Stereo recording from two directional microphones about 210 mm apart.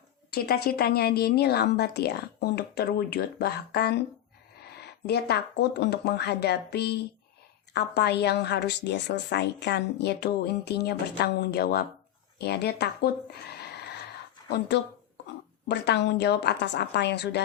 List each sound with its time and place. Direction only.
0.3 s a woman's voice: 45° left (ahead or behind)
15.7 s a woman's voice: 55° left (ahead or behind)